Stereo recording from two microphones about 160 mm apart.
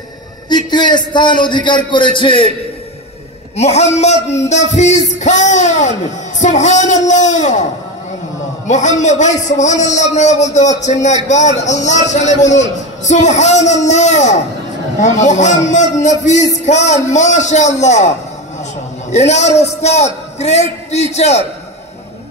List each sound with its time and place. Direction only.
0.5 s a man's voice: 25° left (ahead or behind)
3.5 s a man's voice: 45° left (ahead or behind)
8.6 s a man's voice: 50° left (ahead or behind)